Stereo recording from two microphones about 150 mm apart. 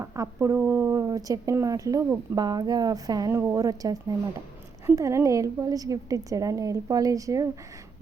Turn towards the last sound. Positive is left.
turn(degrees=-20)  # may be behind; listen again after turning